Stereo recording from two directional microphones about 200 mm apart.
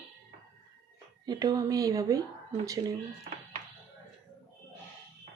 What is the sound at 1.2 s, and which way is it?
A woman's voice, 20° right (ahead or behind).